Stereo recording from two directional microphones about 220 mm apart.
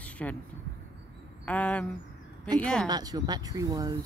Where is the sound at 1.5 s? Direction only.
5° left (ahead or behind).